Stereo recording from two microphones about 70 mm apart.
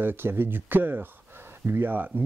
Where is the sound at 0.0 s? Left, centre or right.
Right.